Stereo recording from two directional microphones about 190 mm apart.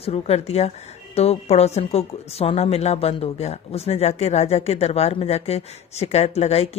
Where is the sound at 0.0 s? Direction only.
30° left (ahead or behind).